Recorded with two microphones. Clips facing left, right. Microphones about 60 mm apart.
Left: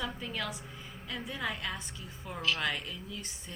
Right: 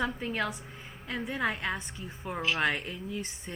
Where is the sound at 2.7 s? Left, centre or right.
Right.